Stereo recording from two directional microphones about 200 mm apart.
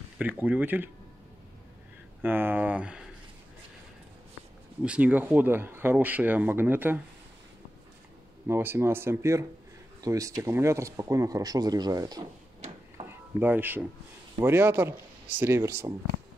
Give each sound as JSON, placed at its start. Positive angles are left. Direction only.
{"t": 0.2, "sound": "speech", "side_deg": -10}
{"t": 2.2, "sound": "speech", "side_deg": -10}
{"t": 4.8, "sound": "speech", "side_deg": -5}
{"t": 8.5, "sound": "speech", "side_deg": -10}
{"t": 13.0, "sound": "a sound", "side_deg": -10}
{"t": 14.4, "sound": "speech", "side_deg": -10}